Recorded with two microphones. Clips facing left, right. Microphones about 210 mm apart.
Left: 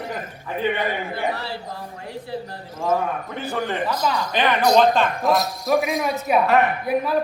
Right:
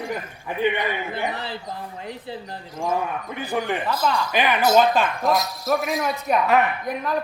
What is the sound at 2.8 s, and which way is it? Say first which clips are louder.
A man's voice: left 3 dB; 15° right (ahead or behind).